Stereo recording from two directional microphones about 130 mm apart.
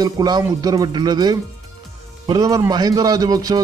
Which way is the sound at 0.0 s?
30° right (ahead or behind).